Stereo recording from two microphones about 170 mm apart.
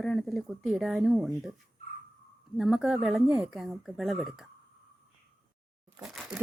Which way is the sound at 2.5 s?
Centre (ahead or behind).